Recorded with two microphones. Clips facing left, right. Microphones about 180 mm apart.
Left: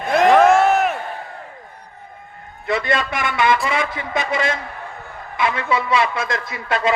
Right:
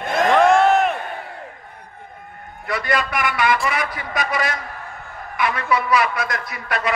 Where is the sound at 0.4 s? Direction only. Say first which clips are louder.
Left 1 dB; 5° left (ahead or behind).